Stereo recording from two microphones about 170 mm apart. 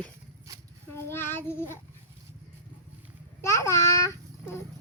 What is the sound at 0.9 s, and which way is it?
Child singing, 15° left (ahead or behind).